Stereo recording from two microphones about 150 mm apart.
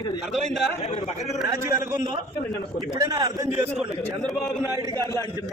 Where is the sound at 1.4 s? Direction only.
25° right (ahead or behind).